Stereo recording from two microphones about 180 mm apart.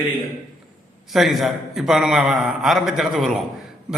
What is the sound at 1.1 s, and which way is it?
Speech, centre (ahead or behind).